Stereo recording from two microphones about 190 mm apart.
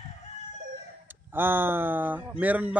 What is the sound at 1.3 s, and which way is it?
Speech, 10° right (ahead or behind).